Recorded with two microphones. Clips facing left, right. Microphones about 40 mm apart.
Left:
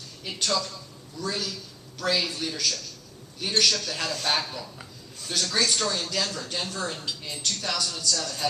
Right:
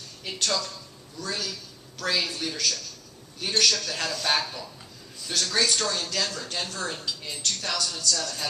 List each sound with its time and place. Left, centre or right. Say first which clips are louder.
0.3 s speech: left 1 dB; centre